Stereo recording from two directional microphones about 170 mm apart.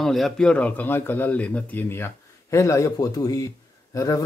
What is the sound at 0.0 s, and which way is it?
Speech, centre (ahead or behind).